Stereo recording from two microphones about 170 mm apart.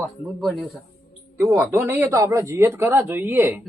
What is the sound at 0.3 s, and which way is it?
Speech, centre (ahead or behind).